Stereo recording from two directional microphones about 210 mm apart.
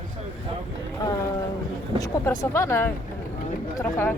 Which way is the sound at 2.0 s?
15° left (ahead or behind).